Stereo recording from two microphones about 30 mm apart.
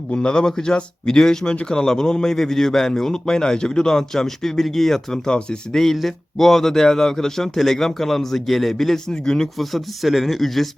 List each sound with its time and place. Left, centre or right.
0.2 s a man's voice: left; by 9.1 s centre
9.2 s speech: centre
9.6 s speech: centre